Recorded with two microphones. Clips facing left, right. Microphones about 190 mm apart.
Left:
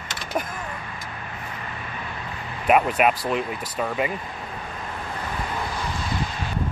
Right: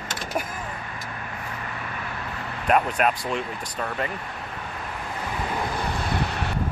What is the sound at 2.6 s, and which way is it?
Speech, 10° left (ahead or behind).